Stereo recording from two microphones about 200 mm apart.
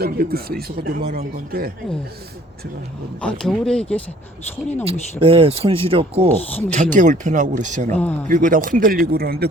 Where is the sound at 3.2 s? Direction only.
5° left (ahead or behind).